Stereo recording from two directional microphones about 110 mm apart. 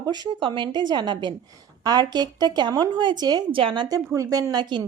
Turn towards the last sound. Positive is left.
turn(degrees=-40)  # may be behind; listen again after turning